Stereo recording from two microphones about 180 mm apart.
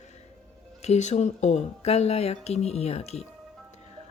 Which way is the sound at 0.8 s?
40° left (ahead or behind).